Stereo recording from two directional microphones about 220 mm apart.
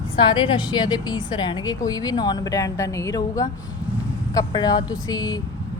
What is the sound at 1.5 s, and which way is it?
Speech, 15° left (ahead or behind).